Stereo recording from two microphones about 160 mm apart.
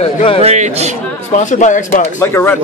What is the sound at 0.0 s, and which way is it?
Speech, 40° left (ahead or behind).